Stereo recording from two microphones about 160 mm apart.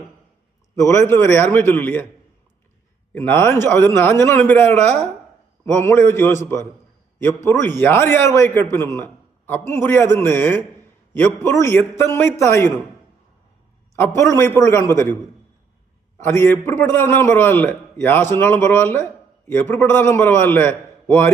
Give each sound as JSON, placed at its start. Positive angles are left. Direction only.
{"t": 0.8, "sound": "a man's voice", "side_deg": 15}
{"t": 3.2, "sound": "a man's voice", "side_deg": 15}
{"t": 14.2, "sound": "a man's voice", "side_deg": 15}
{"t": 16.1, "sound": "a man's voice", "side_deg": 15}